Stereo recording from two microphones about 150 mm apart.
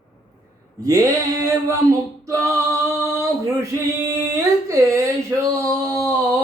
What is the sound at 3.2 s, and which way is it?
Male singing, 20° right (ahead or behind).